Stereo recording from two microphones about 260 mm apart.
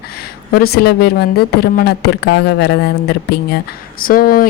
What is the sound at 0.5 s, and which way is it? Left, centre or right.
Speech, left.